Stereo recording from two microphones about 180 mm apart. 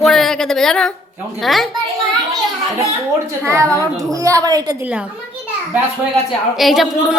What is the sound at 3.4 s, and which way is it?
A woman's voice, 15° right (ahead or behind).